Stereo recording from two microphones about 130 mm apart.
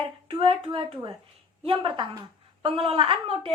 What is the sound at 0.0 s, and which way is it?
A woman's voice, 45° right (ahead or behind).